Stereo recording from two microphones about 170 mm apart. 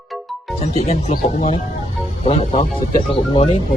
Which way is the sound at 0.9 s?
40° left (ahead or behind).